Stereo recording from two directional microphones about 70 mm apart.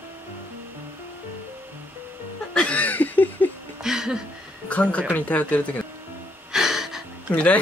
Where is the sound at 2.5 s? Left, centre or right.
Centre.